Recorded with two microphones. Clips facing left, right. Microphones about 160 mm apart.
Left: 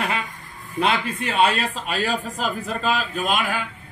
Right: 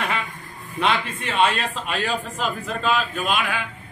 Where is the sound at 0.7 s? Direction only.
40° left (ahead or behind).